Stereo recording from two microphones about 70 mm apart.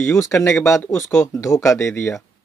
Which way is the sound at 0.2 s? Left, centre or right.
Left.